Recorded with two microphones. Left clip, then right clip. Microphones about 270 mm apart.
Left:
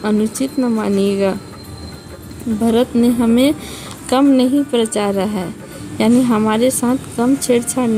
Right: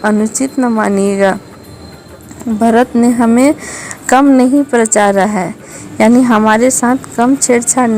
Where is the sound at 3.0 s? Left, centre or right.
Centre.